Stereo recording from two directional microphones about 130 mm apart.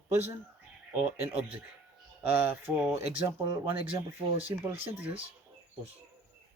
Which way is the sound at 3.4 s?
40° right (ahead or behind).